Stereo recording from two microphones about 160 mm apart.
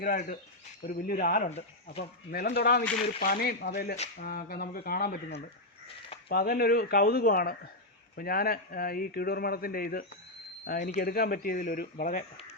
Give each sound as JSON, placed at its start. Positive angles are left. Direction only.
{"t": 0.0, "sound": "speech", "side_deg": 60}
{"t": 1.5, "sound": "speech", "side_deg": 40}
{"t": 2.3, "sound": "speech", "side_deg": 75}
{"t": 4.2, "sound": "speech", "side_deg": 65}
{"t": 6.2, "sound": "speech", "side_deg": 80}